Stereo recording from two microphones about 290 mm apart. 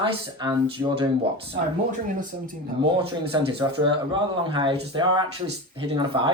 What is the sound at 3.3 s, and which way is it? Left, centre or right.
Speech, centre.